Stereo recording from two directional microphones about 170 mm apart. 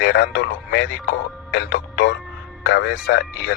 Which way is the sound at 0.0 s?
70° left (ahead or behind).